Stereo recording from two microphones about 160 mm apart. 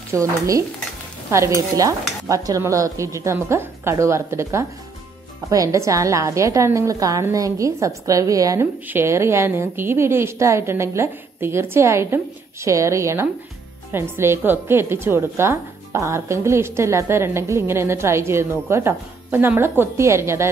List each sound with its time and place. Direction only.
0.1 s stir: 20° right (ahead or behind)
5.5 s a woman's voice: 20° right (ahead or behind)
12.6 s stir: 20° right (ahead or behind)
13.9 s a woman's voice: 15° right (ahead or behind)